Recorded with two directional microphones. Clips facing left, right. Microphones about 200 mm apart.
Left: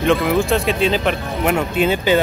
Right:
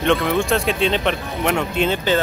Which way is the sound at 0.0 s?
Centre (ahead or behind).